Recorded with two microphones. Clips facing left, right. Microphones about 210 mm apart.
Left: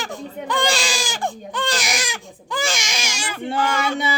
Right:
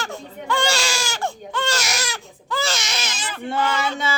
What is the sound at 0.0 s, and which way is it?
Baby cry, 15° left (ahead or behind).